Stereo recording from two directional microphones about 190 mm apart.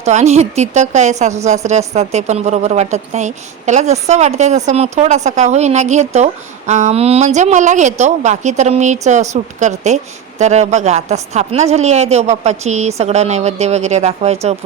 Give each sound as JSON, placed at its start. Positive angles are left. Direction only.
{"t": 0.0, "sound": "a woman's voice", "side_deg": -35}